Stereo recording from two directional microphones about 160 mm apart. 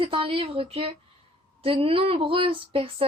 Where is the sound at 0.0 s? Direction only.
35° right (ahead or behind).